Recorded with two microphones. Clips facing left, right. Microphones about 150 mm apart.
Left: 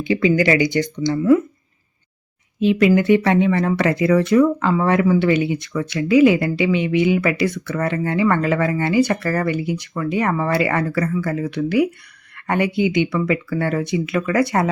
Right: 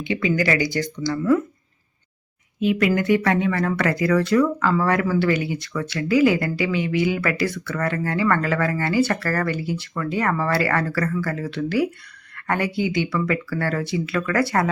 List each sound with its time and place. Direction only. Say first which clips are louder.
0.0 s speech: left 5 dB; 35° left (ahead or behind); by 1.4 s 20° left (ahead or behind)
2.6 s speech: left 5 dB; 25° left (ahead or behind)